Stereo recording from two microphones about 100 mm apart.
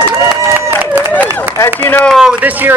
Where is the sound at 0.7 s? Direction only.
15° right (ahead or behind).